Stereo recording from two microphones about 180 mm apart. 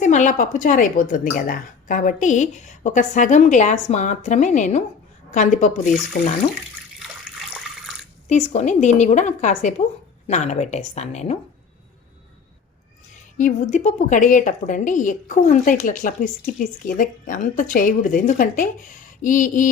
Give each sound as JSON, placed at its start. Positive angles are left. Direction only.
{"t": 0.0, "sound": "a woman's voice", "side_deg": 45}
{"t": 6.1, "sound": "speech", "side_deg": 65}
{"t": 8.3, "sound": "a woman's voice", "side_deg": 40}
{"t": 13.4, "sound": "a woman's voice", "side_deg": 45}